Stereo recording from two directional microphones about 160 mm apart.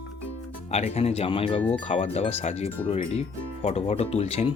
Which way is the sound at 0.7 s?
40° left (ahead or behind).